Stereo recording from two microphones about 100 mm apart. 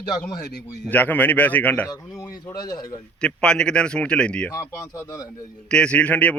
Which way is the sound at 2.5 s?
40° left (ahead or behind).